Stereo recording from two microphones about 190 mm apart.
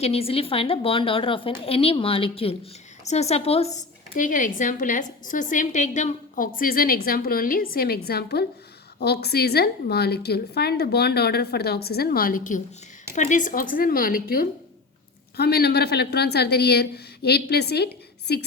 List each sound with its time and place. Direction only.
0.0 s speech: 30° left (ahead or behind)
3.8 s a woman's voice: 45° left (ahead or behind); by 18.4 s 60° left (ahead or behind)